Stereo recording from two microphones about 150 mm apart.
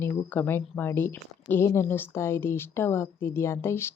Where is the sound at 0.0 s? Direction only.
15° left (ahead or behind).